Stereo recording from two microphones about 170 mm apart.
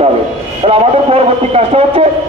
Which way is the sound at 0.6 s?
35° right (ahead or behind).